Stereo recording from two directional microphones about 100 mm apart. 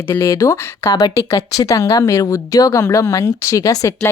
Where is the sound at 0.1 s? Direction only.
30° left (ahead or behind).